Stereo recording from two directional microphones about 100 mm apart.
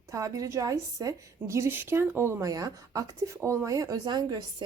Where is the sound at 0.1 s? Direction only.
30° right (ahead or behind).